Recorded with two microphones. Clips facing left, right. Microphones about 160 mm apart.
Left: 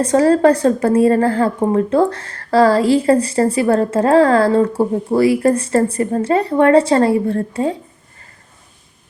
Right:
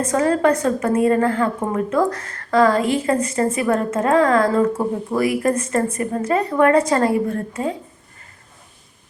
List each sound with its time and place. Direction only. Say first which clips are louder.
0.0 s a woman's voice: left 5 dB; 30° left (ahead or behind)